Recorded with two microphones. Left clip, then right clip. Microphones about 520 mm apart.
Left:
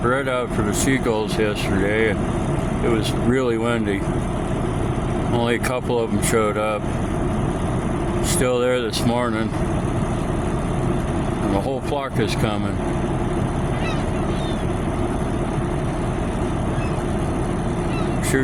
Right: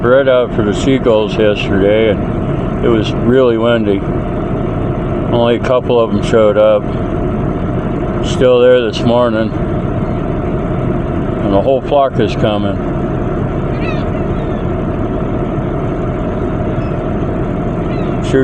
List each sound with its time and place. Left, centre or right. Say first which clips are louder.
0.1 s speech: right 16 dB; left
1.9 s speech: right 10 dB; left
3.3 s speech: right 13 dB; left
5.3 s speech: right 11 dB; left
8.4 s speech: right 13 dB; left
11.5 s speech: right 16 dB; left